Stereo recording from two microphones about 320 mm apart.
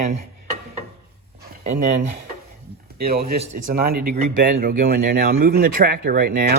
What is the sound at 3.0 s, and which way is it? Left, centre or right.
A man's voice, right.